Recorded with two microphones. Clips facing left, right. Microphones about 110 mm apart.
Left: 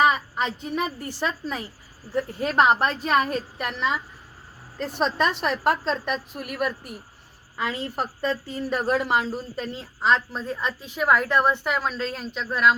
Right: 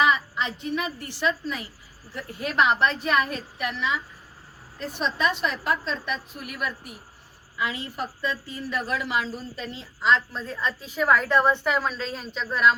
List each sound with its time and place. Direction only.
0.0 s a woman's voice: 40° left (ahead or behind)
3.6 s speech: 50° left (ahead or behind)
4.8 s a woman's voice: 60° left (ahead or behind)
10.3 s a woman's voice: 15° left (ahead or behind)